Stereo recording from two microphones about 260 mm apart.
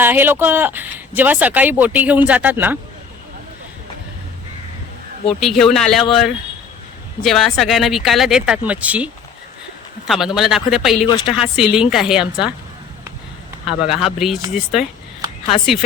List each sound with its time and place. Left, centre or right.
0.0 s speech: centre
5.4 s speech: centre
10.1 s speech: centre
13.7 s speech: centre